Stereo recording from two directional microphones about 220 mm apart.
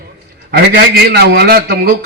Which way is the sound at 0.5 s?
45° right (ahead or behind).